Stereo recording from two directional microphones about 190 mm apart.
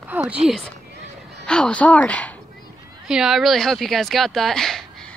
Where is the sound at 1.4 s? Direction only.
5° left (ahead or behind).